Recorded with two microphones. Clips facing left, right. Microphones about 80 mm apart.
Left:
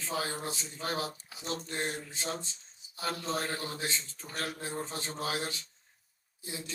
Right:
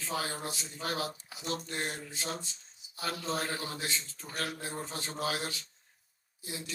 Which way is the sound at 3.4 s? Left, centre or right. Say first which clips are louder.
Left 1 dB; left.